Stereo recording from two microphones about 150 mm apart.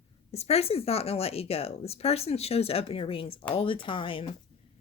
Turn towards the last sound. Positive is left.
turn(degrees=35)  # may be behind; listen again after turning